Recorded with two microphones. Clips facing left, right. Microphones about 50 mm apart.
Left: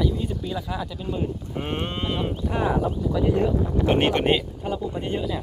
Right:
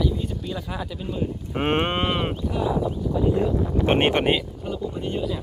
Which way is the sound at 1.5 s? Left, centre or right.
Right.